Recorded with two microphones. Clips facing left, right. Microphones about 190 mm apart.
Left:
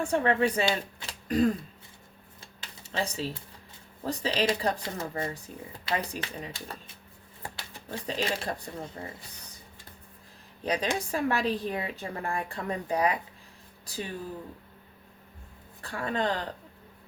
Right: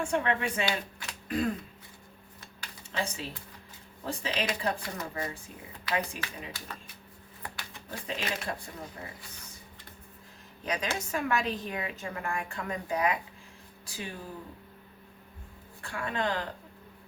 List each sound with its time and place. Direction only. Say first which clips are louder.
0.1 s a woman's voice: left 4 dB; 35° left (ahead or behind)
0.9 s a sound: left 5 dB; 35° left (ahead or behind)
4.0 s a woman's voice: left 5 dB; 35° left (ahead or behind)
10.6 s a woman's voice: left 4 dB; 30° left (ahead or behind)
15.8 s a woman's voice: left 2 dB; 35° left (ahead or behind)